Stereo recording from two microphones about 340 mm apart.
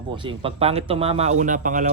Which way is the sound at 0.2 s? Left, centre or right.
Centre.